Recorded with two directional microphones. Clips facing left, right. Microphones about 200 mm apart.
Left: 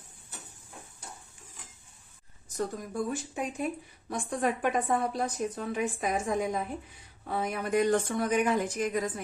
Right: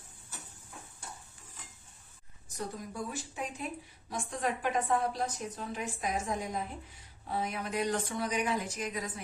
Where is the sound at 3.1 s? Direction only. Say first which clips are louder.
Left 6 dB; 50° left (ahead or behind).